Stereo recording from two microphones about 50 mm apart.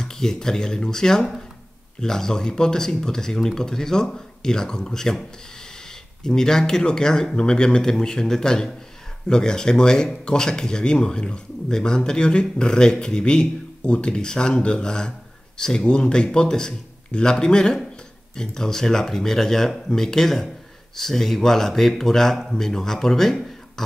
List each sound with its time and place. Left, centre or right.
0.0 s speech: centre
6.2 s speech: centre